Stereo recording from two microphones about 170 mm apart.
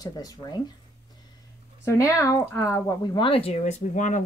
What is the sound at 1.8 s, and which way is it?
Speech, 20° left (ahead or behind).